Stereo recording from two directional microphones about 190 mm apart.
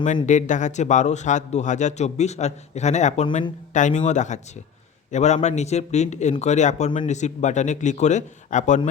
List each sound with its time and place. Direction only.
0.3 s a man's voice: 40° left (ahead or behind)